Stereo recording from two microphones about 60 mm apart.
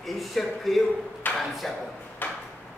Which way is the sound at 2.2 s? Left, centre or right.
Left.